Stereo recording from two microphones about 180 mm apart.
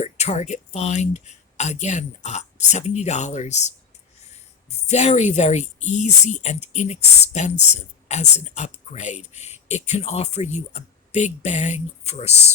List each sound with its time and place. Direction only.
0.0 s speech: 40° left (ahead or behind)
4.9 s speech: 40° left (ahead or behind)